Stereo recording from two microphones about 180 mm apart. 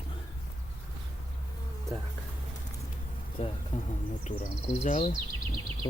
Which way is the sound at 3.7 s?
45° left (ahead or behind).